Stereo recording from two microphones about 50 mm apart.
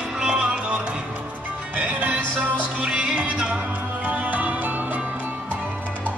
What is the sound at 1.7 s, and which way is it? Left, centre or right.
Music, right.